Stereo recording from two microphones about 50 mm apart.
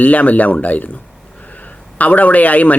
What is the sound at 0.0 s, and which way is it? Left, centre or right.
A man's voice, left.